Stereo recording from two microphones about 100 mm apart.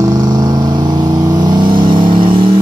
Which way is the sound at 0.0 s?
40° right (ahead or behind).